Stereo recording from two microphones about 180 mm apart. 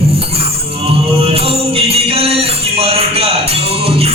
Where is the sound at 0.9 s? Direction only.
35° right (ahead or behind).